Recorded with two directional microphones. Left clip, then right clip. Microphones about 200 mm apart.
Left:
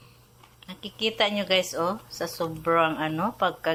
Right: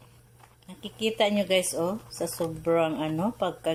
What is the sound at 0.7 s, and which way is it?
A woman's voice, 15° right (ahead or behind).